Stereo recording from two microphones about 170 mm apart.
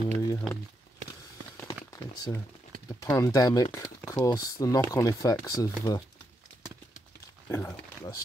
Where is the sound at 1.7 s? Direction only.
25° left (ahead or behind).